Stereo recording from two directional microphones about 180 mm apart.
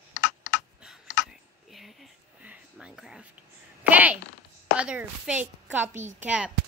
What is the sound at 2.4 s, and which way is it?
Whispering, 5° right (ahead or behind).